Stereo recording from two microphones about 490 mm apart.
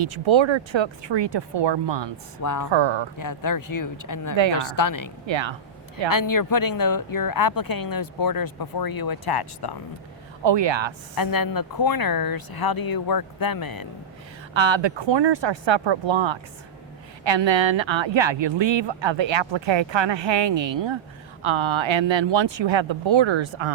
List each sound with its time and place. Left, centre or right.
0.0 s speech: right
2.4 s speech: left
2.7 s speech: right
3.2 s speech: left
5.2 s speech: right
6.1 s speech: left
10.4 s speech: right
11.2 s speech: left
14.5 s speech: right